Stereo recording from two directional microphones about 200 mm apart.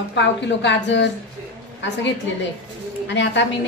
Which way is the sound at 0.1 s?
60° left (ahead or behind).